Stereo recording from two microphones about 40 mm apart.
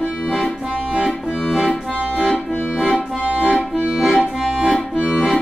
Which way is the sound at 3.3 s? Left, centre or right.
Right.